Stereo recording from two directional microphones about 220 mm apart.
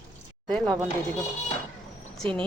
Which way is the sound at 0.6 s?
15° right (ahead or behind).